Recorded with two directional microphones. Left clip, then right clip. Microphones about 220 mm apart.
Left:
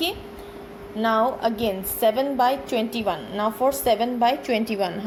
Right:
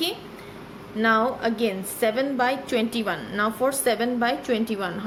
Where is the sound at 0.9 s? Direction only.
Centre (ahead or behind).